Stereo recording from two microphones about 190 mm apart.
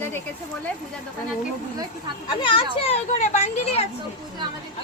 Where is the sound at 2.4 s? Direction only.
25° left (ahead or behind).